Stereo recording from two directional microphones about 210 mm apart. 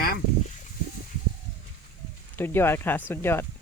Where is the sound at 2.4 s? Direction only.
10° left (ahead or behind).